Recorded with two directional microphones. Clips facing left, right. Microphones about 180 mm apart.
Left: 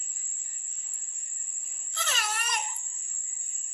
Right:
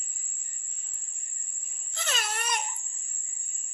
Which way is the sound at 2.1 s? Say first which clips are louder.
Right 2 dB; 30° right (ahead or behind).